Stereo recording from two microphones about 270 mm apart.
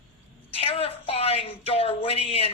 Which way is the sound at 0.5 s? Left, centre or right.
Left.